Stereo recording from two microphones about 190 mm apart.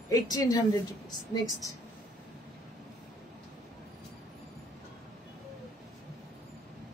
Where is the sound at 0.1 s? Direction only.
20° left (ahead or behind).